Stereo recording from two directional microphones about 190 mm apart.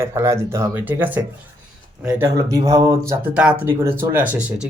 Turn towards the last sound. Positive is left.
turn(degrees=-10)  # may be behind; listen again after turning